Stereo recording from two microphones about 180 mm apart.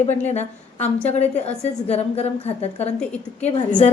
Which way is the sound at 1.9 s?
35° left (ahead or behind).